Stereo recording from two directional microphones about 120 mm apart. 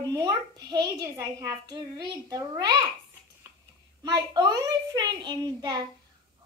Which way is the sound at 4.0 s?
35° right (ahead or behind).